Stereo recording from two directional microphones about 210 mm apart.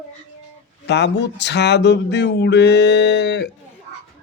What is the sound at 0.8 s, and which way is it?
Speech, 55° left (ahead or behind).